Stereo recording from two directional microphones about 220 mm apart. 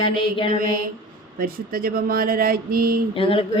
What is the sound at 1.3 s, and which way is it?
Speech, 40° right (ahead or behind).